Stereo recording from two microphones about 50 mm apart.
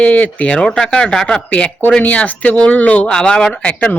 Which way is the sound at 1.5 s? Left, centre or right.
Left.